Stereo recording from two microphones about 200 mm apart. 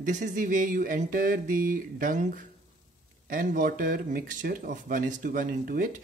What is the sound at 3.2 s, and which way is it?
Speech, 45° right (ahead or behind).